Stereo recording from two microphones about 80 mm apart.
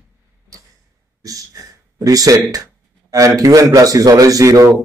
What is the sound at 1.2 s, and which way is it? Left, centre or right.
Speech, right.